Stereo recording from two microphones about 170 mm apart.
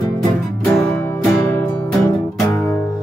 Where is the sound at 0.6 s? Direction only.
15° left (ahead or behind).